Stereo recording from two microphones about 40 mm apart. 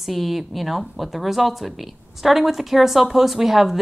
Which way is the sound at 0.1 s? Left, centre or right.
Centre.